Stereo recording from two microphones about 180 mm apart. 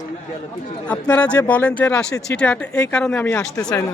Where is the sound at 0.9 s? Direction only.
5° left (ahead or behind).